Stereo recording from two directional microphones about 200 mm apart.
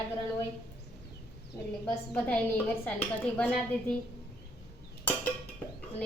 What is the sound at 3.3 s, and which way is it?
Speech, 10° left (ahead or behind).